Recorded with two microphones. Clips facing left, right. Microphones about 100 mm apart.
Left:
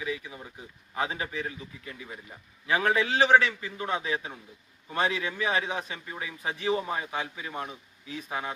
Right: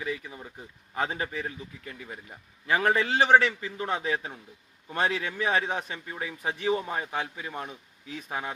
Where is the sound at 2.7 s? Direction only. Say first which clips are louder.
Right 1 dB; 40° right (ahead or behind).